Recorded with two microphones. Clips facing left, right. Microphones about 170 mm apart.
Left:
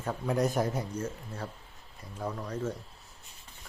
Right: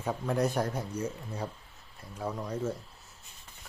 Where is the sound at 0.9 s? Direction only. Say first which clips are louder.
Right 1 dB; 10° right (ahead or behind).